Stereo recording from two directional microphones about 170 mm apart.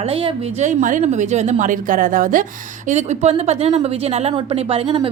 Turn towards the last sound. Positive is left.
turn(degrees=-35)  # may be behind; listen again after turning